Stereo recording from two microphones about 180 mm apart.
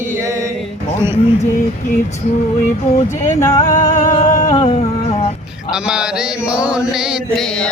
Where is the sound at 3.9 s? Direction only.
40° left (ahead or behind).